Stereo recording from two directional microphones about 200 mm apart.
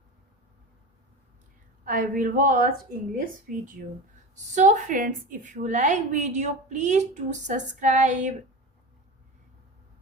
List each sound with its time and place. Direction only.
1.8 s a woman's voice: 45° right (ahead or behind)